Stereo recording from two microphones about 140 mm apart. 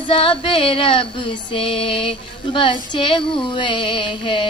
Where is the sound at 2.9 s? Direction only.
35° left (ahead or behind).